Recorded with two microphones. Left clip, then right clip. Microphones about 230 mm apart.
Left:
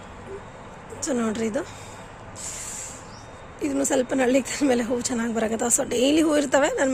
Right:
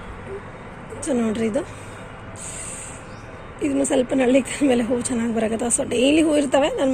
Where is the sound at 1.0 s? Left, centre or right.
Centre.